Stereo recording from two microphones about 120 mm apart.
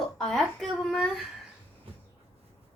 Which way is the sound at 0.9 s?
Centre (ahead or behind).